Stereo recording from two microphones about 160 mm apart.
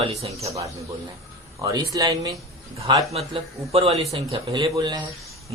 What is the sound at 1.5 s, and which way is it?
A man's voice, 20° right (ahead or behind).